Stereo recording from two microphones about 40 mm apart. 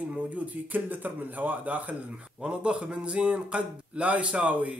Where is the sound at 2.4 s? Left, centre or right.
Right.